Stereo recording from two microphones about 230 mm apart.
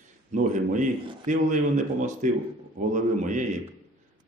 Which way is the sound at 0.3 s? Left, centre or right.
Right.